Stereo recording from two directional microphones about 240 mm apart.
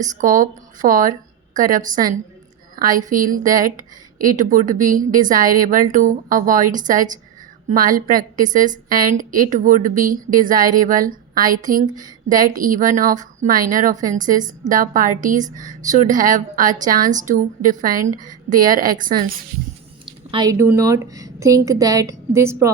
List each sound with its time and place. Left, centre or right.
0.2 s a woman's voice: right
20.1 s a woman's voice: centre